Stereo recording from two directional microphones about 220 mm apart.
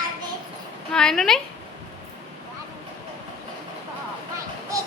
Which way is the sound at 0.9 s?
Centre (ahead or behind).